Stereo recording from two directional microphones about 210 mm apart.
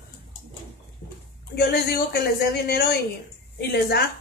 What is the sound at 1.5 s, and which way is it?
Speech, 50° left (ahead or behind).